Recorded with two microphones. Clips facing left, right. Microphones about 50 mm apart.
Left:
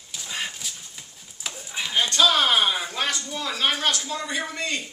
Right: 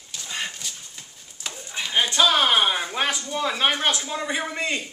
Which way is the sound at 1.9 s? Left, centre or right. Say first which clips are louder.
Right 1 dB; centre.